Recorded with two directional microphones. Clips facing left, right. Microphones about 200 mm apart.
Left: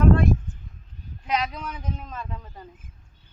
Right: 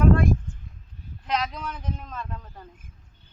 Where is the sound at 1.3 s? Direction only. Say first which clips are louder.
Left 1 dB; 5° left (ahead or behind).